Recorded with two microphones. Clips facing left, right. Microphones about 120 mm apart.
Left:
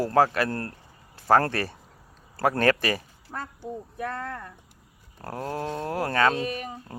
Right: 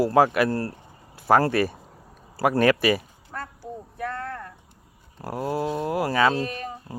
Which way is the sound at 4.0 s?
20° left (ahead or behind).